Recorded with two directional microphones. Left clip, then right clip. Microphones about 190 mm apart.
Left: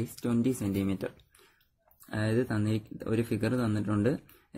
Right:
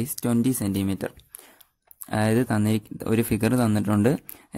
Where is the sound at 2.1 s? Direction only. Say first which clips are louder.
Right 7 dB; 45° right (ahead or behind).